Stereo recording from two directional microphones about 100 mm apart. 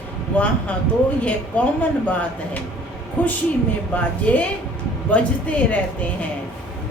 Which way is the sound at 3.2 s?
15° left (ahead or behind).